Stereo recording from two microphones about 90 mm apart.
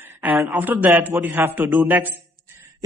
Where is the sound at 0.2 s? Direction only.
15° right (ahead or behind).